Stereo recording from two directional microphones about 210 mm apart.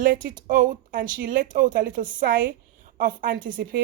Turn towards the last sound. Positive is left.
turn(degrees=-40)  # may be behind; listen again after turning